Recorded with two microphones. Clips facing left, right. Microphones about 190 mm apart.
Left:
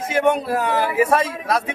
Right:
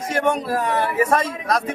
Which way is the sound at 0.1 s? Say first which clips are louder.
Left 2 dB; 5° left (ahead or behind).